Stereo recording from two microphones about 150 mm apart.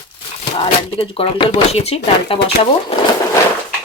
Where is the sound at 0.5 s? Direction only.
40° left (ahead or behind).